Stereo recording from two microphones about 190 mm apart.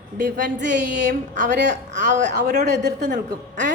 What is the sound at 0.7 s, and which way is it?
Speech, 40° right (ahead or behind).